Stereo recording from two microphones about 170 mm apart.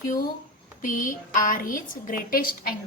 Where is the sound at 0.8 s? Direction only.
50° left (ahead or behind).